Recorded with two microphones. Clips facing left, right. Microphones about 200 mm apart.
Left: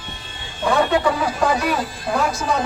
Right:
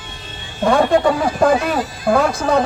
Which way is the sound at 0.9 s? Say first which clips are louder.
Right 4 dB; 45° right (ahead or behind).